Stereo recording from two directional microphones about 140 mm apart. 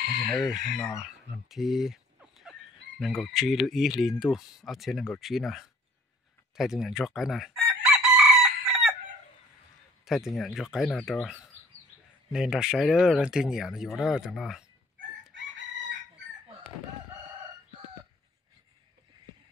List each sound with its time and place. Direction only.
0.3 s speech: 5° left (ahead or behind)
6.5 s chicken: 5° right (ahead or behind)
10.0 s speech: centre (ahead or behind)